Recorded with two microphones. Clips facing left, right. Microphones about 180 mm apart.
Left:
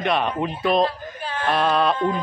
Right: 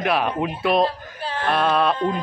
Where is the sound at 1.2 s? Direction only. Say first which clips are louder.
Right 2 dB; 35° right (ahead or behind).